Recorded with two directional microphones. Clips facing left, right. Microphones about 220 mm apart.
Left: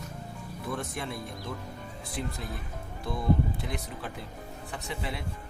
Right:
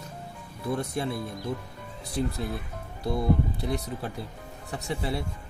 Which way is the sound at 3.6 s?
40° right (ahead or behind).